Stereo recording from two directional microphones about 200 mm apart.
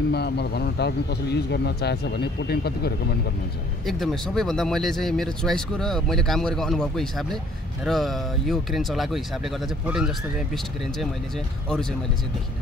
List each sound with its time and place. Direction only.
0.1 s a man's voice: 55° left (ahead or behind)
3.8 s speech: centre (ahead or behind)